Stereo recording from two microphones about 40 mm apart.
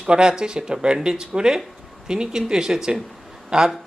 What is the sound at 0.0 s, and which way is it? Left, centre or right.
Speech, right.